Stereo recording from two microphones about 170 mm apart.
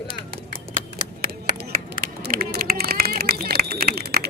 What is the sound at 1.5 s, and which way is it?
Run, 65° right (ahead or behind).